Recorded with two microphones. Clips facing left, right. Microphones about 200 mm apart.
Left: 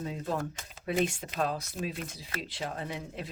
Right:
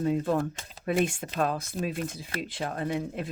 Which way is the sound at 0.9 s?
50° right (ahead or behind).